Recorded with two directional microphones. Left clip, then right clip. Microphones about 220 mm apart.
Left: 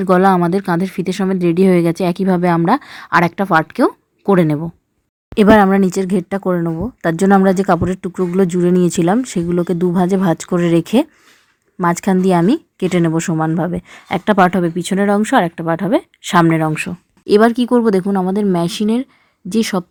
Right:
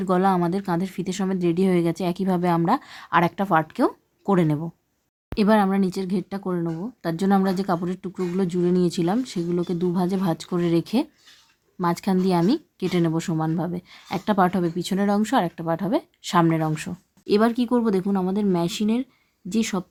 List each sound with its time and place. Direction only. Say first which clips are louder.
0.0 s a woman's voice: left 9 dB; 25° left (ahead or behind)